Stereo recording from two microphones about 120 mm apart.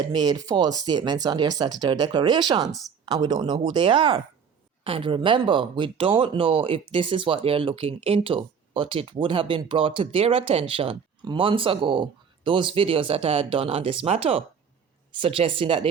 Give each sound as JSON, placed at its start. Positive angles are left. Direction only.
{"t": 0.1, "sound": "speech", "side_deg": -35}